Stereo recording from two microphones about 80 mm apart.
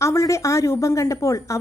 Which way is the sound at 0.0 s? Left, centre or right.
Left.